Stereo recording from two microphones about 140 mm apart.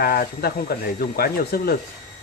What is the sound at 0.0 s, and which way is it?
Speech, 90° left.